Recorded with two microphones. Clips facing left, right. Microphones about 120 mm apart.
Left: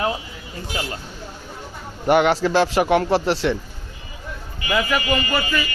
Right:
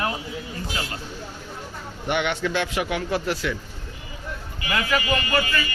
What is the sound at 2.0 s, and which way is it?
A man's voice, 40° left (ahead or behind).